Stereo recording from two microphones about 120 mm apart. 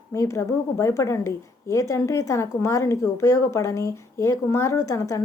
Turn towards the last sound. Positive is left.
turn(degrees=25)  # may be behind; listen again after turning